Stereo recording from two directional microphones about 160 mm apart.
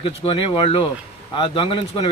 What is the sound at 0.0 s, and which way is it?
Speech, 35° left (ahead or behind).